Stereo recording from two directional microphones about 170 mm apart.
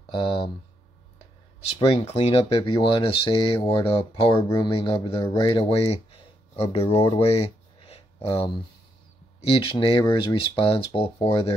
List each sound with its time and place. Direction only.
0.1 s speech: 30° left (ahead or behind)
1.8 s speech: 35° left (ahead or behind)